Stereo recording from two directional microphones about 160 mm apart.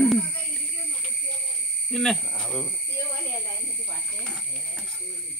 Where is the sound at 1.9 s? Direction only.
5° left (ahead or behind).